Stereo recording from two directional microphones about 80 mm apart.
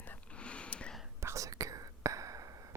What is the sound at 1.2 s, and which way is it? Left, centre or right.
Whispering, right.